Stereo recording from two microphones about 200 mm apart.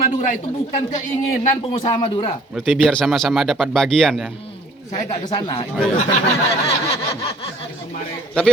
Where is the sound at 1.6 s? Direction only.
30° left (ahead or behind).